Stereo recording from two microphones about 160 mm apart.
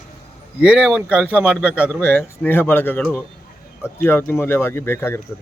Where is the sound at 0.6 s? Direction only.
5° right (ahead or behind).